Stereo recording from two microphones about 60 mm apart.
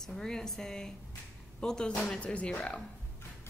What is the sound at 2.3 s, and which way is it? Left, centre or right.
Speech, left.